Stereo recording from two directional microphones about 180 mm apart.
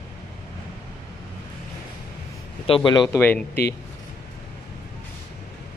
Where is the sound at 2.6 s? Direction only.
30° left (ahead or behind).